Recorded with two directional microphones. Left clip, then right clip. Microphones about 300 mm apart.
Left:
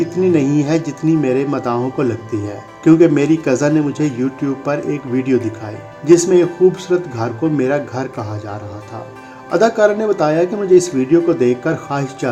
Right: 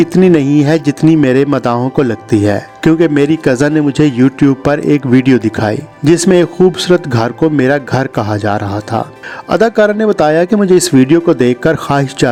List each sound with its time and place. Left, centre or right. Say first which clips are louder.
0.0 s speech: right 6 dB; right